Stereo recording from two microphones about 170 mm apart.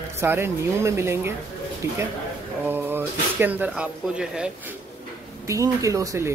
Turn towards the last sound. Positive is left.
turn(degrees=-15)  # may be behind; listen again after turning